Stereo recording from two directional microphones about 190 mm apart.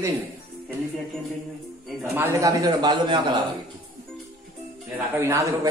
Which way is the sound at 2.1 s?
15° right (ahead or behind).